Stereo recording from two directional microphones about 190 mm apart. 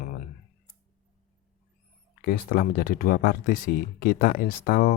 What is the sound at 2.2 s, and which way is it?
Speech, 50° left (ahead or behind).